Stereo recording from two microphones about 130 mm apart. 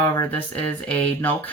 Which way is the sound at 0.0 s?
15° left (ahead or behind).